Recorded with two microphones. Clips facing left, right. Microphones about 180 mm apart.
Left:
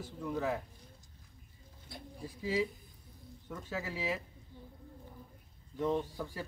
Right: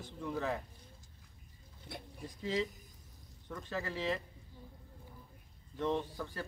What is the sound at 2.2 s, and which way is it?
Speech, 5° left (ahead or behind).